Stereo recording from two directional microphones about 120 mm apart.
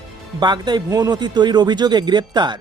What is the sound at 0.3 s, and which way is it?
Speech, 35° right (ahead or behind).